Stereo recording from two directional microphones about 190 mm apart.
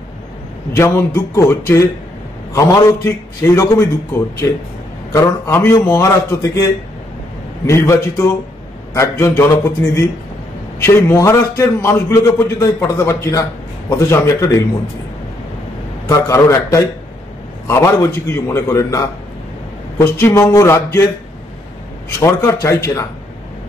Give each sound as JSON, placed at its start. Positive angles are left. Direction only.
{"t": 0.7, "sound": "a man's voice", "side_deg": 15}
{"t": 5.1, "sound": "a man's voice", "side_deg": 15}
{"t": 10.8, "sound": "a man's voice", "side_deg": 15}
{"t": 16.1, "sound": "a man's voice", "side_deg": 15}
{"t": 22.2, "sound": "a man's voice", "side_deg": 15}